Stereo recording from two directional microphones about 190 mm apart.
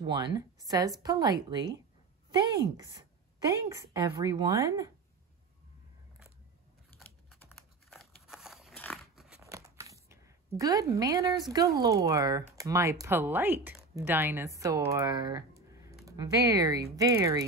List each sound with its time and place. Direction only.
0.0 s speech: 20° right (ahead or behind)
2.8 s speech: 20° right (ahead or behind)
7.0 s typing: 10° left (ahead or behind)
7.4 s biting: centre (ahead or behind)
9.4 s a sound: 15° right (ahead or behind)
11.8 s speech: 15° right (ahead or behind)